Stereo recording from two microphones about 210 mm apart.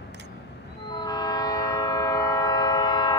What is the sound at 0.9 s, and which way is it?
Train, 20° left (ahead or behind).